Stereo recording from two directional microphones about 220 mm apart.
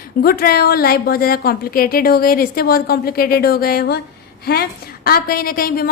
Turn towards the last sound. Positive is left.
turn(degrees=40)  # may be behind; listen again after turning